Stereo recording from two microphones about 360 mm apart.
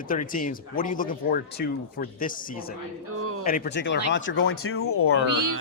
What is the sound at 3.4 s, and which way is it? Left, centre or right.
Speech, left.